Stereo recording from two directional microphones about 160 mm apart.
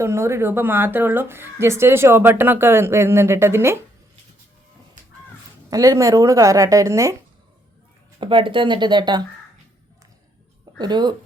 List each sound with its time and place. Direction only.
0.0 s speech: 15° right (ahead or behind)
5.7 s a woman's voice: 20° right (ahead or behind)
8.2 s a woman's voice: 30° right (ahead or behind)
10.8 s a woman's voice: 25° right (ahead or behind)